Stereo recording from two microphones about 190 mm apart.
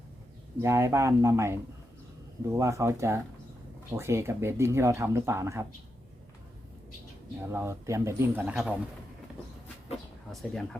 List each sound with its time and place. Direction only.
0.6 s speech: 15° right (ahead or behind)
7.5 s speech: 15° right (ahead or behind)
10.3 s speech: centre (ahead or behind)